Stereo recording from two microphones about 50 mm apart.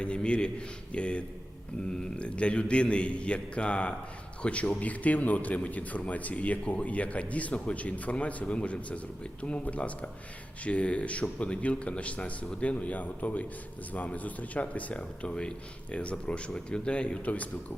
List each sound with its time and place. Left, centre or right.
0.0 s speech: left